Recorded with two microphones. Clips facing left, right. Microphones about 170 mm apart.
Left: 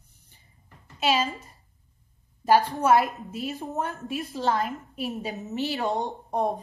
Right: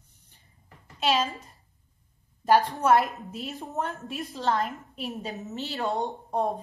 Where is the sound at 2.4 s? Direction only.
5° left (ahead or behind).